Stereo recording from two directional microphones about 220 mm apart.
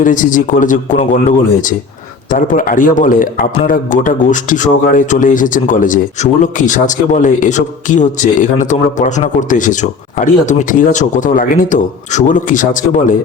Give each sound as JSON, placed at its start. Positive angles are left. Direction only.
{"t": 0.0, "sound": "a man's voice", "side_deg": 35}
{"t": 2.3, "sound": "a man's voice", "side_deg": 40}